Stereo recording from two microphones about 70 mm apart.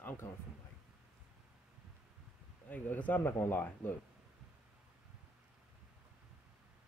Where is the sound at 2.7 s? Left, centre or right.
Left.